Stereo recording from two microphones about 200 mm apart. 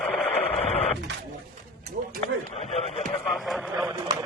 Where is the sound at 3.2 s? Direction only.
Centre (ahead or behind).